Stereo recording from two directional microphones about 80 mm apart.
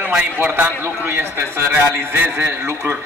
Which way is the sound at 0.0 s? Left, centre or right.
Centre.